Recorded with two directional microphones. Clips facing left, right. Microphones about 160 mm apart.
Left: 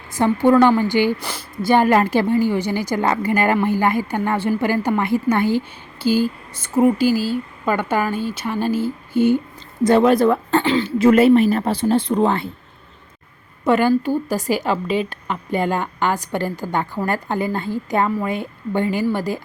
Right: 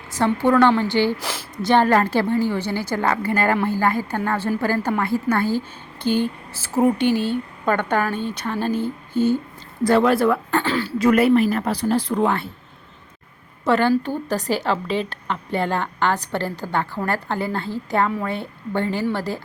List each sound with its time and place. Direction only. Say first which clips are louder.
0.1 s a woman's voice: left 3 dB; 15° left (ahead or behind)
1.2 s speech: left 1 dB; centre (ahead or behind)
1.7 s a woman's voice: left 2 dB; 15° left (ahead or behind)
6.1 s a sound: left 3 dB; 5° left (ahead or behind)
6.6 s a woman's voice: left 3 dB; centre (ahead or behind); by 12.5 s 20° left (ahead or behind)
13.7 s a woman's voice: left 2 dB; 10° left (ahead or behind)